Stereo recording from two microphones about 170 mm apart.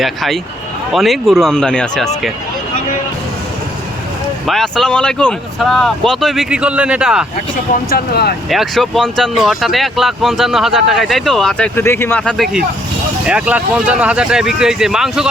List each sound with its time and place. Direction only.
0.0 s speech: centre (ahead or behind)
4.4 s speech: centre (ahead or behind)
7.5 s speech: 60° left (ahead or behind)
8.4 s speech: centre (ahead or behind)